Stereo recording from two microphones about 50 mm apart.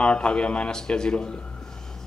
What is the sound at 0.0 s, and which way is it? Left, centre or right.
Speech, left.